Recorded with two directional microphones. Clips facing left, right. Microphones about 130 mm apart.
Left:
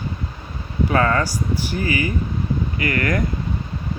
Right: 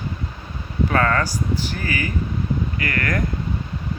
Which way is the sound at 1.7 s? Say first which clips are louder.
Left 4 dB; 45° right (ahead or behind).